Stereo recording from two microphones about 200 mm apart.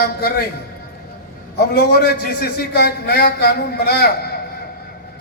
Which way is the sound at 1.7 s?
55° left (ahead or behind).